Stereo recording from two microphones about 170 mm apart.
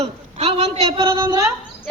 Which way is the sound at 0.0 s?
40° right (ahead or behind).